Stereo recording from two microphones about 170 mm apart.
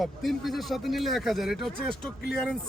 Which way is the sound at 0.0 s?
Centre (ahead or behind).